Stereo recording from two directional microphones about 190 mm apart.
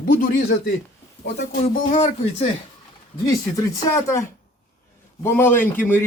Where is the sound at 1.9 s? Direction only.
35° left (ahead or behind).